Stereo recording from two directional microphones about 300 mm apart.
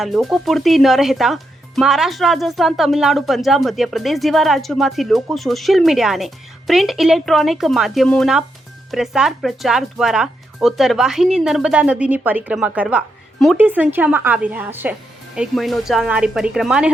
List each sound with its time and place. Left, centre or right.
0.0 s speech: centre